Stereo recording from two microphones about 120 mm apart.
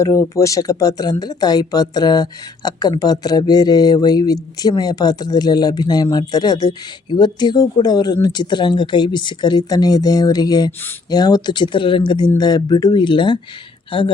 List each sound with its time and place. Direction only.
0.0 s speech: 25° left (ahead or behind); by 13.4 s 40° left (ahead or behind)